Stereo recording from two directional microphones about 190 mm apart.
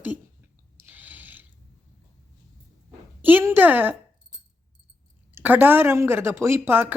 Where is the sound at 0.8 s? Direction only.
10° right (ahead or behind).